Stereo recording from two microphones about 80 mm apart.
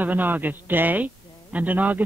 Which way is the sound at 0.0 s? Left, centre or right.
Right.